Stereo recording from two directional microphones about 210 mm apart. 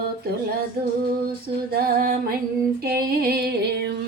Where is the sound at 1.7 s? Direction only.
45° right (ahead or behind).